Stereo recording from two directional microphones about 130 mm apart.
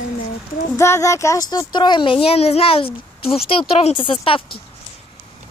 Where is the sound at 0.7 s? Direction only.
20° left (ahead or behind); by 4.4 s 40° left (ahead or behind).